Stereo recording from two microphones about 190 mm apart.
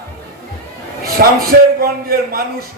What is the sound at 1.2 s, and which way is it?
A man's voice, 50° right (ahead or behind).